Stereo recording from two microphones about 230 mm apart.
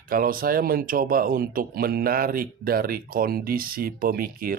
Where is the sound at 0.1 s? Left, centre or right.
Right.